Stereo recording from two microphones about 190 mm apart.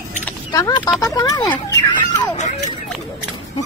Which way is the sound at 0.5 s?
20° left (ahead or behind).